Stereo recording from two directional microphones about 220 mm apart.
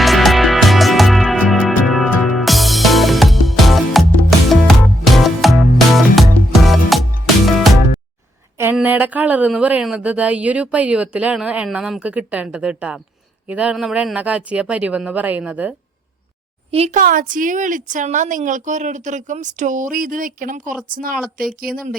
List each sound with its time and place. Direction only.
0.0 s music: centre (ahead or behind)
8.5 s a woman's voice: 10° right (ahead or behind)
16.7 s a woman's voice: 30° right (ahead or behind)